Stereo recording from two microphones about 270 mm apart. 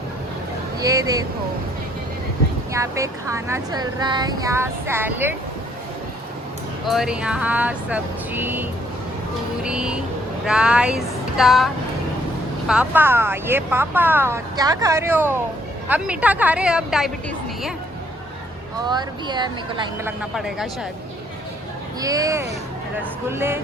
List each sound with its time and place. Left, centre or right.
0.8 s speech: centre
2.7 s speech: centre
6.8 s speech: centre
9.6 s speech: centre
18.9 s speech: centre
20.3 s speech: centre
22.0 s speech: centre